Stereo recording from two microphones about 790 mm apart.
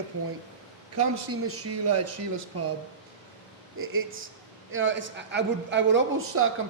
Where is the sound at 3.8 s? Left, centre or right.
Centre.